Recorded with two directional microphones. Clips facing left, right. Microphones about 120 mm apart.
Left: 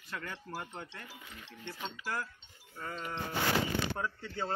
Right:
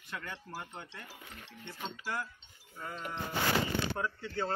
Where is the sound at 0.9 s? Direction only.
10° right (ahead or behind).